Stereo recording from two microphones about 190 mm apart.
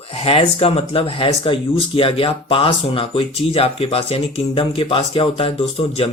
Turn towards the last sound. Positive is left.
turn(degrees=30)  # may be behind; listen again after turning